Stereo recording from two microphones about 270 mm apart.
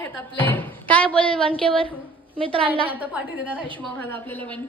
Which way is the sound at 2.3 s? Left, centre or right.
Centre.